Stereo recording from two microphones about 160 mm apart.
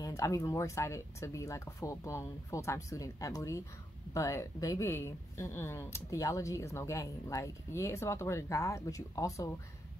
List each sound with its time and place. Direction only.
0.0 s speech: 20° left (ahead or behind)